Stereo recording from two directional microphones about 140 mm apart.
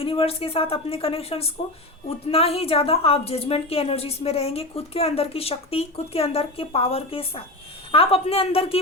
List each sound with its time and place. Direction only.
0.0 s a woman's voice: 40° left (ahead or behind)